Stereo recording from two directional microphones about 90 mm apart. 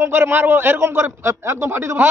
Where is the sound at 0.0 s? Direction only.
25° right (ahead or behind).